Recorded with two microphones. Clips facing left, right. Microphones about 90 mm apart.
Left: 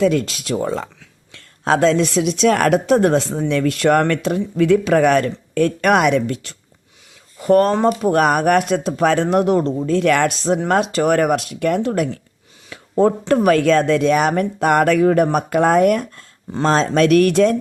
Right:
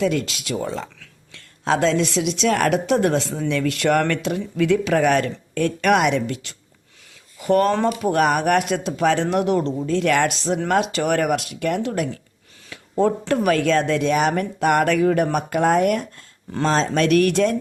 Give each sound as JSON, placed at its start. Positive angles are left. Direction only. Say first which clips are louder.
{"t": 0.0, "sound": "speech", "louder": "left 5 dB", "side_deg": 40}